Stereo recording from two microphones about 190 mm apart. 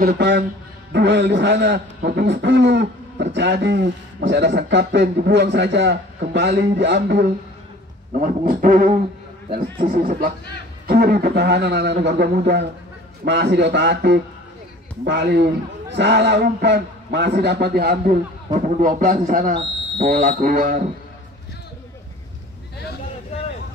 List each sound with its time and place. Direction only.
0.0 s speech: 60° right (ahead or behind)
8.2 s a man's voice: 45° right (ahead or behind)
18.8 s a man's voice: 45° right (ahead or behind)